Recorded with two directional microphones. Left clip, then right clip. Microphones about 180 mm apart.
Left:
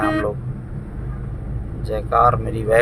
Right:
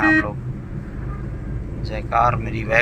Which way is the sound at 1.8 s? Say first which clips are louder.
Left 3 dB; 30° left (ahead or behind).